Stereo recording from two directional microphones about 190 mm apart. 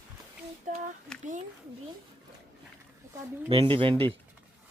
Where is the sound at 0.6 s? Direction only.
40° right (ahead or behind).